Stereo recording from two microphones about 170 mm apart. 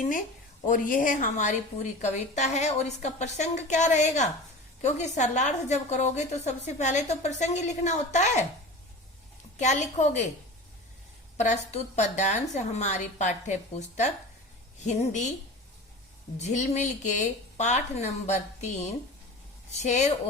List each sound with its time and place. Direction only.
0.7 s a woman's voice: 55° left (ahead or behind)
9.6 s a woman's voice: 45° left (ahead or behind)
11.3 s a woman's voice: 40° left (ahead or behind)
16.4 s a woman's voice: 45° left (ahead or behind)
19.7 s a woman's voice: 40° left (ahead or behind)